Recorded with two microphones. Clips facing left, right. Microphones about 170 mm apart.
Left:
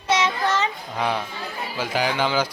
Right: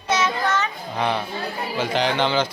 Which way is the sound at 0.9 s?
Centre (ahead or behind).